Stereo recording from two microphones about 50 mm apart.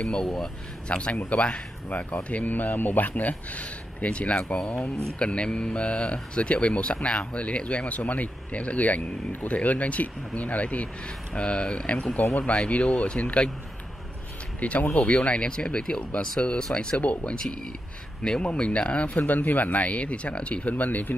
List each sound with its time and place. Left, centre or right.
0.0 s speech: centre
0.8 s speech: left
14.6 s speech: left
17.0 s speech: left